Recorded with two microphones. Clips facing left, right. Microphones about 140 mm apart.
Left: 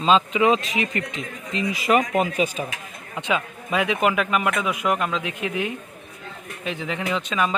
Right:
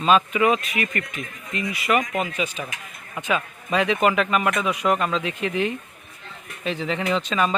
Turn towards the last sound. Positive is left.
turn(degrees=5)  # may be behind; listen again after turning